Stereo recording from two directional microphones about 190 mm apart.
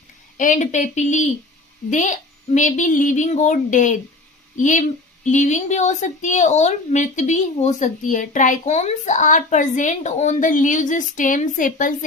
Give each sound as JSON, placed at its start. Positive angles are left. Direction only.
{"t": 0.3, "sound": "speech", "side_deg": 40}